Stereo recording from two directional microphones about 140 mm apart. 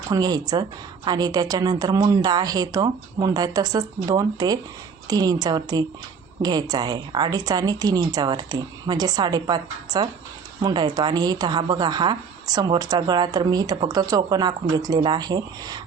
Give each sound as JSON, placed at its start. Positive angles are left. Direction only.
{"t": 0.1, "sound": "a woman's voice", "side_deg": -30}